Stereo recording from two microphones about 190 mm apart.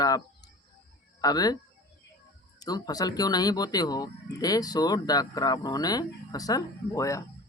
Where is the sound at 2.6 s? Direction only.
20° left (ahead or behind).